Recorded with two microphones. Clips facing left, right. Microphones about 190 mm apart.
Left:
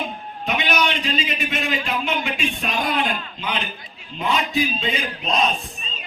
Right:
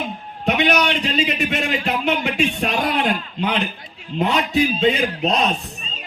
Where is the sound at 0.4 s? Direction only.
65° right (ahead or behind).